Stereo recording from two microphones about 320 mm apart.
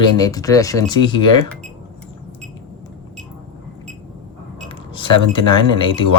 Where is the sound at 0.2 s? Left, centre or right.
Centre.